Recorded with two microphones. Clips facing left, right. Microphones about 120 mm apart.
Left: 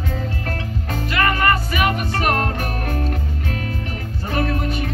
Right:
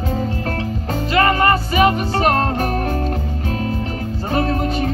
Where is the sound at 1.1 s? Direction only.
30° right (ahead or behind).